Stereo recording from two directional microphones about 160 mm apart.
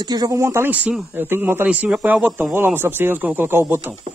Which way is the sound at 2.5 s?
15° right (ahead or behind).